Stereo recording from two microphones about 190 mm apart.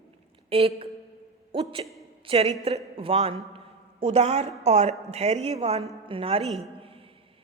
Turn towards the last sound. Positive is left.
turn(degrees=-30)  # may be behind; listen again after turning